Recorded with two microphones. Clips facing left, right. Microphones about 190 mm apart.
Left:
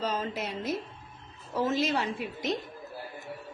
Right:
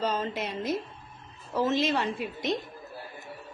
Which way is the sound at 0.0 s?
5° left (ahead or behind).